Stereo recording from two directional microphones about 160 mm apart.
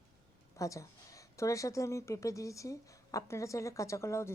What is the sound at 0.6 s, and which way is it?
A woman's voice, 20° left (ahead or behind).